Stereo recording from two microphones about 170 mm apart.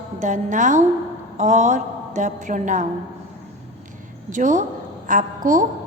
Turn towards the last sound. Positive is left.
turn(degrees=-50)  # may be behind; listen again after turning